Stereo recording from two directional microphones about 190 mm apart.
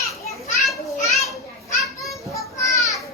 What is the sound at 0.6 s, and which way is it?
Children playing, centre (ahead or behind).